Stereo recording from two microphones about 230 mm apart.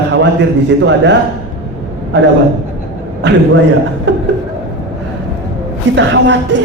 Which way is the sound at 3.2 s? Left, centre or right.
Right.